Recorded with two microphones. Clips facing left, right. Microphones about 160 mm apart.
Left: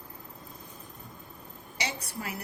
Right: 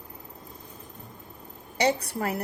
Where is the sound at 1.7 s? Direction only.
55° right (ahead or behind).